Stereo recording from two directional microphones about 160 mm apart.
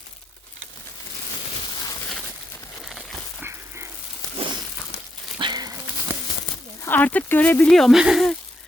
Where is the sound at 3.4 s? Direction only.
15° right (ahead or behind).